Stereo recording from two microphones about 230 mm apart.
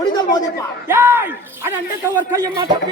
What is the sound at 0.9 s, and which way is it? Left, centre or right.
Speech, centre.